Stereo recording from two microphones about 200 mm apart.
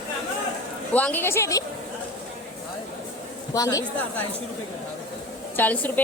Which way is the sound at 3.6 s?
15° left (ahead or behind).